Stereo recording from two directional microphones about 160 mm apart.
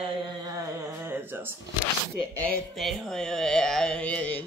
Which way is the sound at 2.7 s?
Centre (ahead or behind).